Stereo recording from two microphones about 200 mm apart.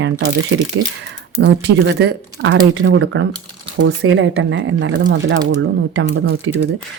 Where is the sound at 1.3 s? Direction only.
60° right (ahead or behind); by 6.6 s 85° right.